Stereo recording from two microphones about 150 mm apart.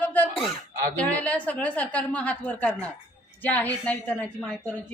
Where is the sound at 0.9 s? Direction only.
10° left (ahead or behind).